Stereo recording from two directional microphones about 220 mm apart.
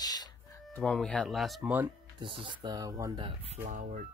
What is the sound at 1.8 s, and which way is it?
Speech, 25° right (ahead or behind).